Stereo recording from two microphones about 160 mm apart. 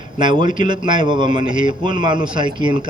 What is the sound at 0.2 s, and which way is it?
A man's voice, 30° right (ahead or behind).